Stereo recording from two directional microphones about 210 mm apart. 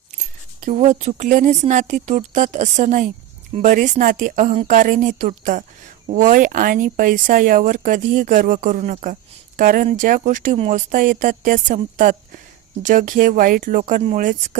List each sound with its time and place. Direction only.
0.6 s speech: 30° right (ahead or behind)